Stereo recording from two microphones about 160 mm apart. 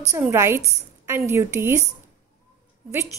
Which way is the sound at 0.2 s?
15° right (ahead or behind).